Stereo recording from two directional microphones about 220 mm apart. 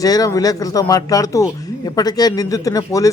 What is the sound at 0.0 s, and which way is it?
A man's voice, 15° left (ahead or behind).